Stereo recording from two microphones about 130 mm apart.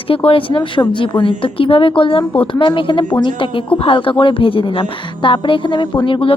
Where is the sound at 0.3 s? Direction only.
40° left (ahead or behind).